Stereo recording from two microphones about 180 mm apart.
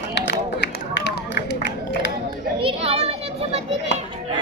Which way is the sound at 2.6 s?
30° right (ahead or behind).